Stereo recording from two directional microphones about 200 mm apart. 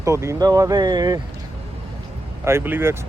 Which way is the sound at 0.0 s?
15° right (ahead or behind).